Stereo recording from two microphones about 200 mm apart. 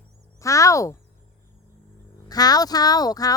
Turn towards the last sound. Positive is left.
turn(degrees=20)  # may be behind; listen again after turning